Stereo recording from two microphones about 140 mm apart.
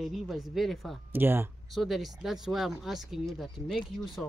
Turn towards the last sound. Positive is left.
turn(degrees=0)  # may be behind; listen again after turning